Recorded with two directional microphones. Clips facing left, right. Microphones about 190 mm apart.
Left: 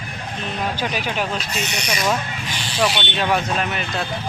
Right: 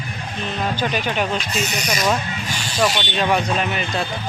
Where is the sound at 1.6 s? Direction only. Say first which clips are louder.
Right 2 dB; 40° right (ahead or behind).